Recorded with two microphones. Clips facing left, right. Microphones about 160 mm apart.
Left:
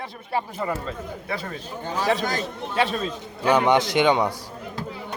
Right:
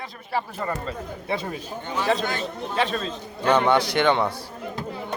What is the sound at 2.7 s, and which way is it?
A man's voice, 5° left (ahead or behind).